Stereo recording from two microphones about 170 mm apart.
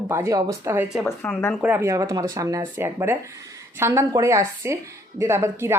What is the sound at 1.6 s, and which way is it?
Speech, 10° right (ahead or behind).